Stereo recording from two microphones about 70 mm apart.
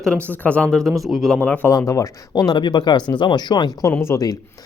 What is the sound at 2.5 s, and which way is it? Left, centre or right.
Speech, left.